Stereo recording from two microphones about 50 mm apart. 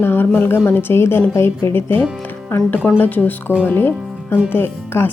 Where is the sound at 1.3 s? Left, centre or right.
Left.